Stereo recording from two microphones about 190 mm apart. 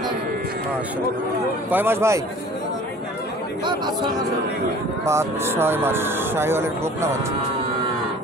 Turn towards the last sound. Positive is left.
turn(degrees=-15)  # may be behind; listen again after turning